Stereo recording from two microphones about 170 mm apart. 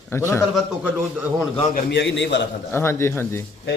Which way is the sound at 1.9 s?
90° left.